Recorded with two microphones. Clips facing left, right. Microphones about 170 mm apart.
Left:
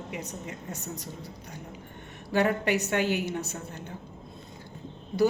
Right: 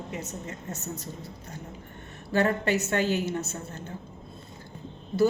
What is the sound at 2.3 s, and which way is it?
A woman's voice, 15° left (ahead or behind).